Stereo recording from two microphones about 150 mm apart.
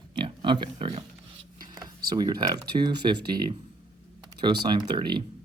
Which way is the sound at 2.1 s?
30° right (ahead or behind).